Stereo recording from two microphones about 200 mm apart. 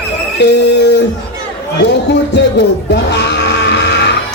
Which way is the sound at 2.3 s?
60° left (ahead or behind).